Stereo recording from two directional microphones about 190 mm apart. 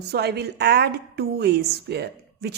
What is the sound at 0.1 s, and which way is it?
A woman's voice, 60° right (ahead or behind).